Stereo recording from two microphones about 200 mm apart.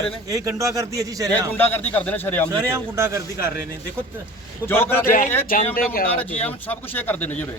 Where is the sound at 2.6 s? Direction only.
15° right (ahead or behind).